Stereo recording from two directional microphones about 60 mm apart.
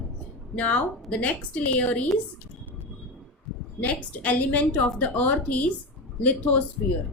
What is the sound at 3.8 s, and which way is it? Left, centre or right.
Speech, left.